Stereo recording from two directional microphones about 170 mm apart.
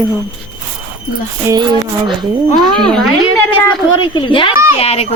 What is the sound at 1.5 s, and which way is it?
Speech, 25° right (ahead or behind).